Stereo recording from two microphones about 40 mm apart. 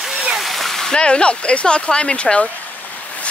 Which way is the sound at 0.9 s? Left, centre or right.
Left.